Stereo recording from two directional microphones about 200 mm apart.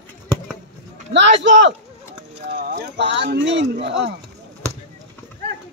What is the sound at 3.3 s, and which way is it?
Speech, 60° right (ahead or behind).